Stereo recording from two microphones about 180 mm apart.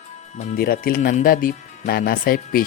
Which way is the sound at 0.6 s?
55° left (ahead or behind).